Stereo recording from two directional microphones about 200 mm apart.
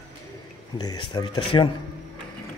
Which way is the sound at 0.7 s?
20° left (ahead or behind).